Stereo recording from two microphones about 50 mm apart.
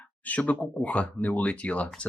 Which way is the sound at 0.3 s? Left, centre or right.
Left.